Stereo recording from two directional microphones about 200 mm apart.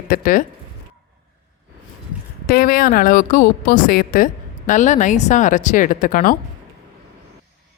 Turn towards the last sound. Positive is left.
turn(degrees=45)  # may be behind; listen again after turning